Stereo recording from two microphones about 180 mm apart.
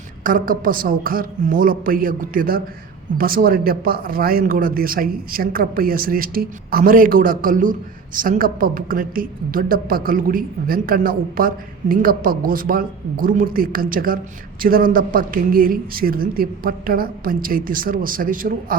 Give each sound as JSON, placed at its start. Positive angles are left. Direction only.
{"t": 0.3, "sound": "speech", "side_deg": -50}